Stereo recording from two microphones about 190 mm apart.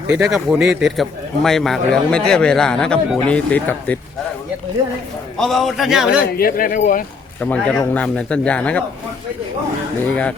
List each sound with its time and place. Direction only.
0.1 s speech: 5° right (ahead or behind)
5.4 s speech: centre (ahead or behind)
6.3 s speech: 50° left (ahead or behind)
7.4 s speech: 5° left (ahead or behind)